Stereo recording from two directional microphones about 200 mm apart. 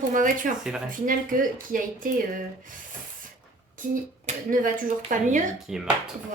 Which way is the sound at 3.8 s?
45° right (ahead or behind).